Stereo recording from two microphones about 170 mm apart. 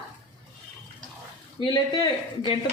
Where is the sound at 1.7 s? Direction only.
25° left (ahead or behind).